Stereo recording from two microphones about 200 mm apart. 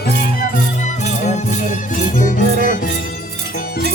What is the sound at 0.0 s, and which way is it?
Music, 50° left (ahead or behind).